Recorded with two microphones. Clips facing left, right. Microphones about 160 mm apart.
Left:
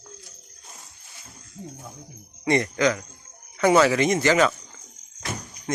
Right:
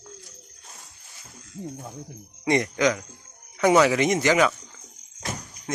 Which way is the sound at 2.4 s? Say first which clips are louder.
Even; 15° right (ahead or behind).